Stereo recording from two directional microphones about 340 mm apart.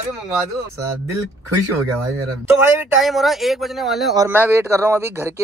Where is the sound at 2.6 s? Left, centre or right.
Centre.